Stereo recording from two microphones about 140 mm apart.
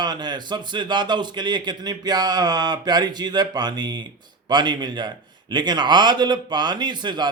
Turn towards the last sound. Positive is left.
turn(degrees=-30)  # may be behind; listen again after turning